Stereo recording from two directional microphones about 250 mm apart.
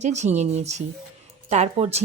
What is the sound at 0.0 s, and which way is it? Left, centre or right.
Speech, right.